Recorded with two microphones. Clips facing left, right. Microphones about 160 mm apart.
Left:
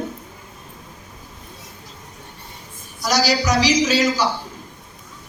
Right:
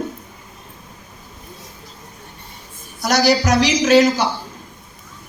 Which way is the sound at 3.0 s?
55° right (ahead or behind).